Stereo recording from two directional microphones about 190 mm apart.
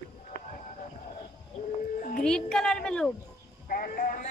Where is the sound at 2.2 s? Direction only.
5° left (ahead or behind).